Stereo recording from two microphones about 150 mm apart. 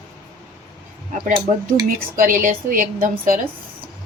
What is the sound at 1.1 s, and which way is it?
A woman's voice, 60° right (ahead or behind).